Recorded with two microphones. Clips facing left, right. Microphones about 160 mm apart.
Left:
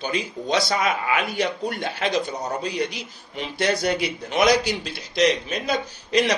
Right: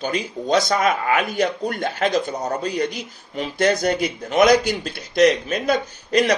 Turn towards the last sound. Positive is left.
turn(degrees=-50)  # may be behind; listen again after turning